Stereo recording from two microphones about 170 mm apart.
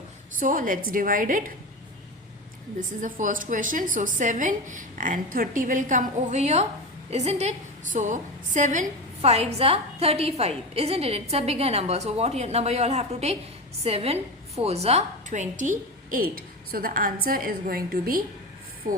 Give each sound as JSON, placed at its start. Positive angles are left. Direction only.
{"t": 0.3, "sound": "a woman's voice", "side_deg": -50}
{"t": 2.7, "sound": "a woman's voice", "side_deg": -50}